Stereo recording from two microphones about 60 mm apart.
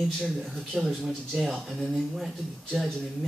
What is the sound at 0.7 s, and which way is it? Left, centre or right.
Speech, centre.